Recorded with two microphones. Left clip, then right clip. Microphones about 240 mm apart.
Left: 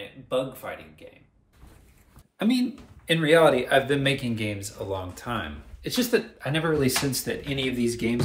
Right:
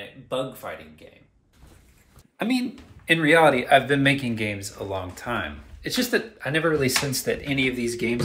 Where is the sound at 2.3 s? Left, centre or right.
Centre.